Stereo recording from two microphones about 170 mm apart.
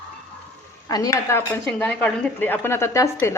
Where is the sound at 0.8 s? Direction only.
20° left (ahead or behind).